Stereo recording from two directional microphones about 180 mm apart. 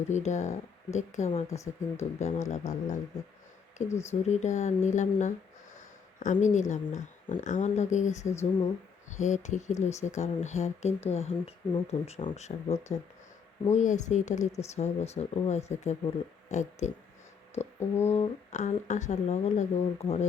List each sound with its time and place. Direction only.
0.1 s speech: 40° left (ahead or behind)
1.5 s speech: 15° left (ahead or behind)
2.1 s speech: 40° left (ahead or behind)
4.1 s speech: 40° left (ahead or behind)
17.5 s a sound: 40° left (ahead or behind)
18.1 s speech: 40° left (ahead or behind)